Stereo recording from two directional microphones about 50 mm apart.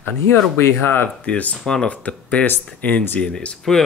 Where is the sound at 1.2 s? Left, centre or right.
Left.